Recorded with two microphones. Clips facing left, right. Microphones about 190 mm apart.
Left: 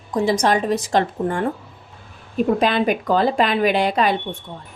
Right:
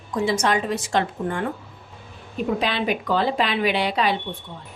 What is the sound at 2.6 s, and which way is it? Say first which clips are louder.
Speech: left 5 dB; 45° left (ahead or behind).